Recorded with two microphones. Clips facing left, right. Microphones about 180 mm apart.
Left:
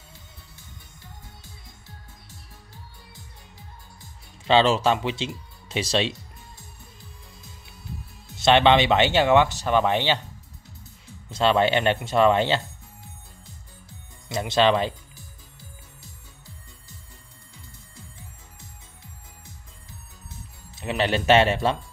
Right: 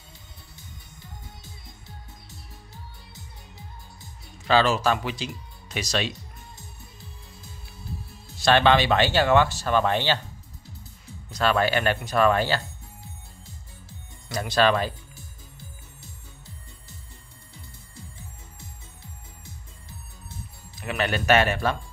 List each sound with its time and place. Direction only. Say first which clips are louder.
4.5 s speech: left 2 dB; 25° left (ahead or behind)
8.4 s speech: left 2 dB; 20° left (ahead or behind)
11.2 s speech: left 3 dB; 25° left (ahead or behind)
14.3 s speech: left 1 dB; 20° left (ahead or behind)
20.7 s speech: left 3 dB; 25° left (ahead or behind)